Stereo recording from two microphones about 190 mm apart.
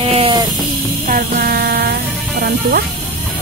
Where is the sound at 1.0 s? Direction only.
50° right (ahead or behind).